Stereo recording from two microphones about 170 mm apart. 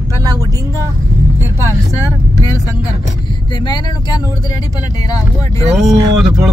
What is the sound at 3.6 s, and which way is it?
Speech, 25° left (ahead or behind).